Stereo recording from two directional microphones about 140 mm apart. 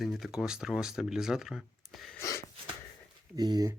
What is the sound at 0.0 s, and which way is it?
Speech, centre (ahead or behind).